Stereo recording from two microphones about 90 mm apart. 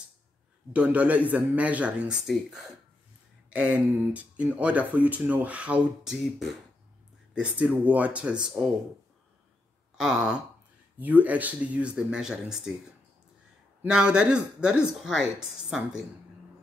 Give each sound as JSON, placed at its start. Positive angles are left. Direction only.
{"t": 0.7, "sound": "speech", "side_deg": -15}
{"t": 2.2, "sound": "speech", "side_deg": -5}
{"t": 7.3, "sound": "speech", "side_deg": -15}
{"t": 9.9, "sound": "speech", "side_deg": -10}
{"t": 13.8, "sound": "speech", "side_deg": -10}